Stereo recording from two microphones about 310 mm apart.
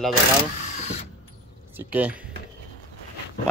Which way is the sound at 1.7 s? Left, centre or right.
Centre.